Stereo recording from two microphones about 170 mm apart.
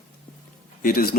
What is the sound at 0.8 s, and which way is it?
Speech, 60° left (ahead or behind).